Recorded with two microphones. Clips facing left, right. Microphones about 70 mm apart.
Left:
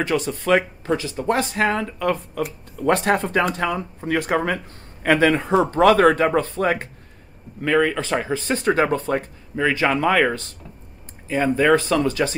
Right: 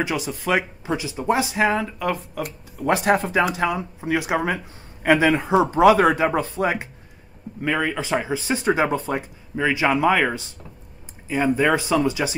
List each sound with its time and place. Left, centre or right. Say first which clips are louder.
0.0 s speech: left 2 dB; centre